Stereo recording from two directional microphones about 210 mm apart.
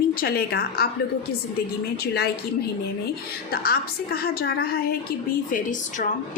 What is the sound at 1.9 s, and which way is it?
Speech, 50° left (ahead or behind).